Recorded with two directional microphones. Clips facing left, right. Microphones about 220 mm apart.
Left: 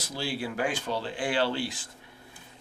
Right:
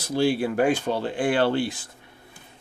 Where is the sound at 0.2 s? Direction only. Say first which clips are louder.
Right 9 dB; 60° right (ahead or behind).